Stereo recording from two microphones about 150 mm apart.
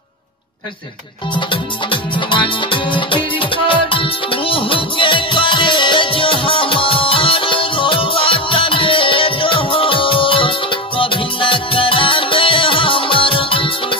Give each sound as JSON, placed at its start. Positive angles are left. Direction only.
{"t": 1.3, "sound": "music", "side_deg": 35}